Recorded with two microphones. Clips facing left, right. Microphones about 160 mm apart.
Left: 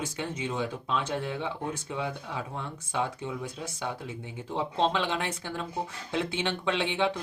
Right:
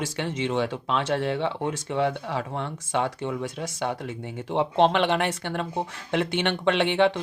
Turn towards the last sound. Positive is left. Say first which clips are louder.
# right 6 dB
turn(degrees=-70)  # may be behind; listen again after turning